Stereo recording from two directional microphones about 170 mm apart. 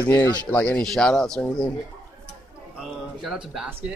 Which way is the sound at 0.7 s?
5° left (ahead or behind).